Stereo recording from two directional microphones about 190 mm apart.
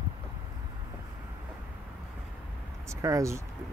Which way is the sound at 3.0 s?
15° right (ahead or behind).